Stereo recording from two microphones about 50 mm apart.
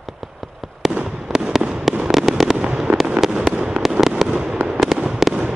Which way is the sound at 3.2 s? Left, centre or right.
Centre.